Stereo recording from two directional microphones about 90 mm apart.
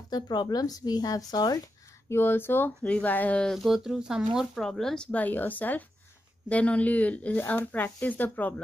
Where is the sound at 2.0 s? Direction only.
25° left (ahead or behind).